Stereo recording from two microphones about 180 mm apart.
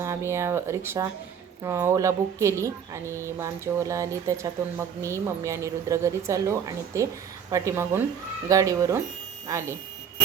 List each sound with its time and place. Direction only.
0.0 s a woman's voice: 15° right (ahead or behind)